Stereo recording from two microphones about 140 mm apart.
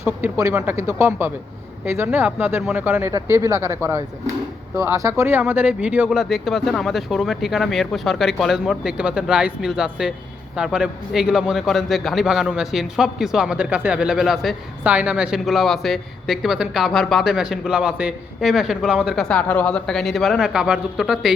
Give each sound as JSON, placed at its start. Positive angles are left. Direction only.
{"t": 0.0, "sound": "speech", "side_deg": -20}
{"t": 3.1, "sound": "a man's voice", "side_deg": -20}